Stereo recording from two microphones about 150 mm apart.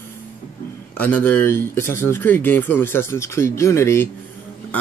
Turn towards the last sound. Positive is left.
turn(degrees=20)  # may be behind; listen again after turning